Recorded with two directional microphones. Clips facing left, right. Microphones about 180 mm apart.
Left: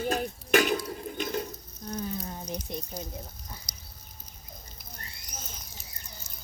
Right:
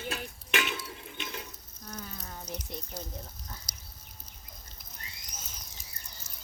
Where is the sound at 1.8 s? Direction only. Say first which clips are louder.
Left 9 dB; 25° left (ahead or behind).